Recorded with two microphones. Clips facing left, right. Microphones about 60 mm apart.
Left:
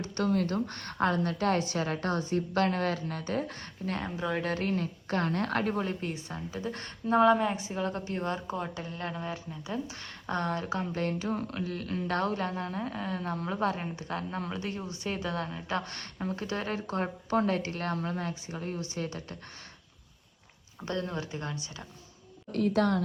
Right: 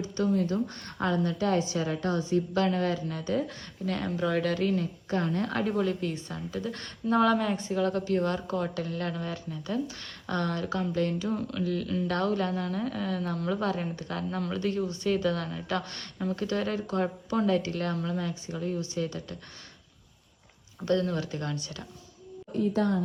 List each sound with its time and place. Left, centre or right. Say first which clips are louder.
0.0 s a woman's voice: right 1 dB; left
4.0 s speech: right 5 dB; centre
4.4 s a woman's voice: right 3 dB; left
5.8 s a woman's voice: right 4 dB; left
6.1 s a woman's voice: right 3 dB; centre
13.8 s a woman's voice: right 2 dB; centre; by 19.4 s left
20.8 s speech: right 6 dB; left
22.5 s a woman's voice: even; left